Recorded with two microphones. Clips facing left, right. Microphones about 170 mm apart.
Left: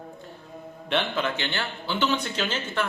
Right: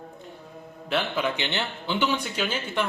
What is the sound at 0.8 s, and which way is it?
A man's voice, 5° right (ahead or behind).